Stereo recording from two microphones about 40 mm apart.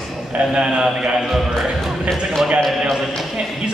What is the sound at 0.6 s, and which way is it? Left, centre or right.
Speech, right.